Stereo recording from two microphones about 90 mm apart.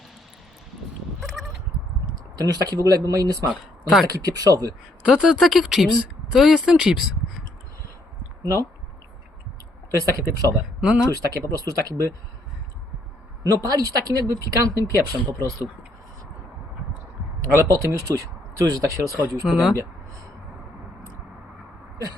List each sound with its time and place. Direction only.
1.4 s bleat: centre (ahead or behind)
2.3 s speech: 45° right (ahead or behind)
5.0 s speech: 10° right (ahead or behind)
5.4 s speech: centre (ahead or behind)
9.9 s speech: 40° right (ahead or behind)
10.8 s speech: 10° right (ahead or behind)
11.1 s speech: 40° right (ahead or behind)
13.4 s speech: 45° right (ahead or behind)
17.4 s speech: 40° right (ahead or behind)
19.5 s speech: 5° right (ahead or behind)